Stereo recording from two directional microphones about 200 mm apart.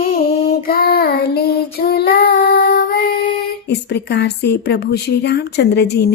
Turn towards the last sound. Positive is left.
turn(degrees=55)  # may be behind; listen again after turning